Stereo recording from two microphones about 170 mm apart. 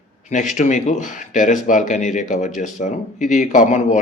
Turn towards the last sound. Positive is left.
turn(degrees=45)  # may be behind; listen again after turning